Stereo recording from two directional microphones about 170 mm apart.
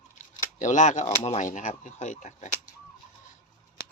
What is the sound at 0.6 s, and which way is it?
Speech, 45° left (ahead or behind).